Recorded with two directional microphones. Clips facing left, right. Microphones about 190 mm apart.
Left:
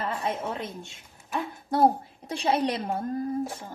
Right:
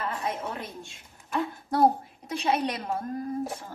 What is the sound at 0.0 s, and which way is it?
Speech, 25° left (ahead or behind).